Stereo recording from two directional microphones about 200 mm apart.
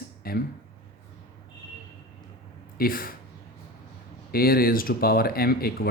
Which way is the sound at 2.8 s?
45° left (ahead or behind).